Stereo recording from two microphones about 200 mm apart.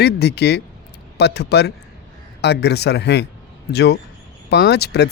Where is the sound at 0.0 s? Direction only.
55° left (ahead or behind).